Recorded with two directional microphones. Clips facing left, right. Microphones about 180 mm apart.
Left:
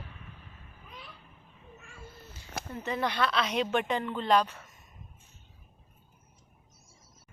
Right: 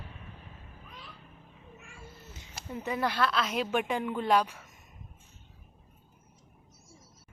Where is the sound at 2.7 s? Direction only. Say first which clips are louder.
Right 1 dB; 10° right (ahead or behind).